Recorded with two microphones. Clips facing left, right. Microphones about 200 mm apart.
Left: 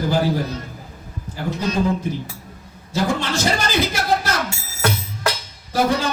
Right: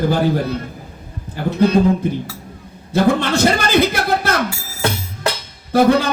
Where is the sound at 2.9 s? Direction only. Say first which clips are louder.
Right 6 dB; 60° right (ahead or behind).